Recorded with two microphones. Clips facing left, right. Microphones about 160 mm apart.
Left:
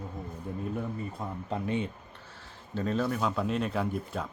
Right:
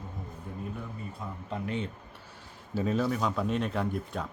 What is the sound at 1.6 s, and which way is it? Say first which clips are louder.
Speech: left 3 dB; 20° left (ahead or behind).